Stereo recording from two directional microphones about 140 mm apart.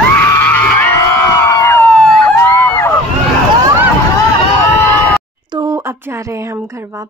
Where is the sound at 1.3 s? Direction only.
20° left (ahead or behind).